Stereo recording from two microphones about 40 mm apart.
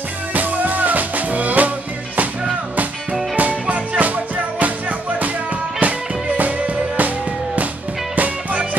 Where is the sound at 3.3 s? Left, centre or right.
Right.